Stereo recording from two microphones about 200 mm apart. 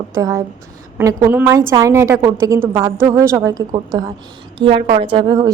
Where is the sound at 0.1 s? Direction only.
15° right (ahead or behind).